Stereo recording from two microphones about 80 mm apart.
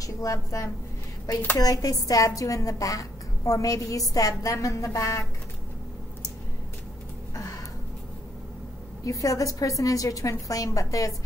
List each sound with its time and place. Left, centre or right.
0.0 s a woman's voice: left
7.3 s a sound: left
9.0 s a woman's voice: left